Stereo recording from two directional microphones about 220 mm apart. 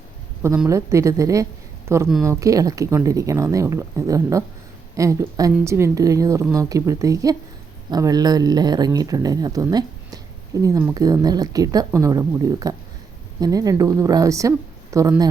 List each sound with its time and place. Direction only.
0.4 s speech: 10° right (ahead or behind)